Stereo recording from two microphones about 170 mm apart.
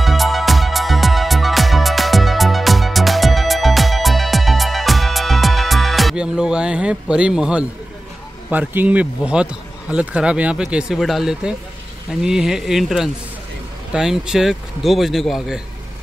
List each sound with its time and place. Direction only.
0.0 s music: centre (ahead or behind)
8.5 s a man's voice: 10° right (ahead or behind)